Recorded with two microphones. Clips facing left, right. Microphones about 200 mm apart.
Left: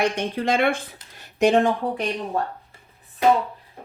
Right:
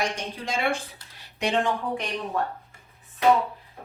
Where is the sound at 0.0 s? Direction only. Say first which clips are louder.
Left 7 dB; 60° left (ahead or behind).